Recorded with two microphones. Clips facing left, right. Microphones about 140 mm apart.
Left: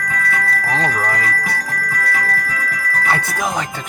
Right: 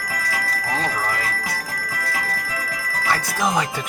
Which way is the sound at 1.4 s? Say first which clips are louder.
Left 5 dB; 60° left (ahead or behind).